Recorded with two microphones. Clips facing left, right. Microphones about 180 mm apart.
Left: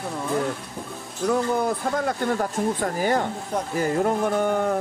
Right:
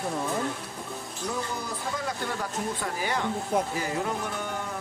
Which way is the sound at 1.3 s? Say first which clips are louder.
Left 11 dB; 55° left (ahead or behind).